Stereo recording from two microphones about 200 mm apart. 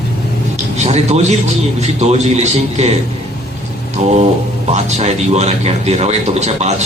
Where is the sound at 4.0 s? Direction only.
35° right (ahead or behind).